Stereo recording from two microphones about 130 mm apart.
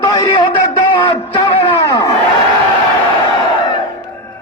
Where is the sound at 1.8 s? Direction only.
30° left (ahead or behind).